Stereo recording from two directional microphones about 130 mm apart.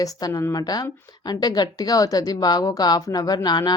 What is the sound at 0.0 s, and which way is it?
A woman's voice, 25° left (ahead or behind).